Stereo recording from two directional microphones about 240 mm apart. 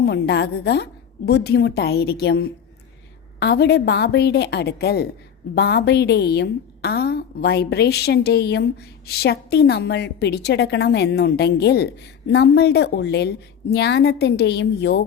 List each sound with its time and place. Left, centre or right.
0.0 s a woman's voice: left